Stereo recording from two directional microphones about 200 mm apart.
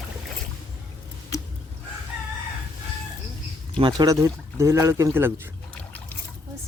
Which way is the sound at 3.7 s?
25° right (ahead or behind).